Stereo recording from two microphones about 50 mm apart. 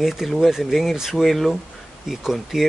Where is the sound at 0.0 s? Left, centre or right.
Centre.